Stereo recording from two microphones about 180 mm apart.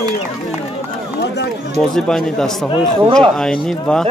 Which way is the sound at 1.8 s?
5° left (ahead or behind).